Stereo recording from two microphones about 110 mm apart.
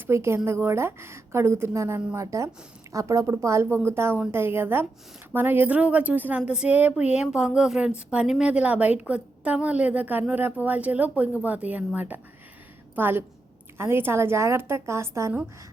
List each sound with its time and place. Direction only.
0.1 s a woman's voice: 25° right (ahead or behind)